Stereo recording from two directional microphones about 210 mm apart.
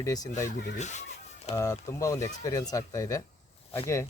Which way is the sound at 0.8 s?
35° left (ahead or behind).